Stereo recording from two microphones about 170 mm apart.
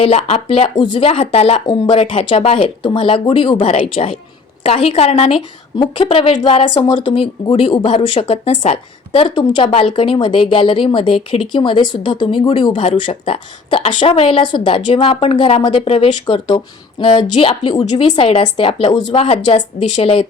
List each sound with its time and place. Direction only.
0.0 s speech: 35° left (ahead or behind)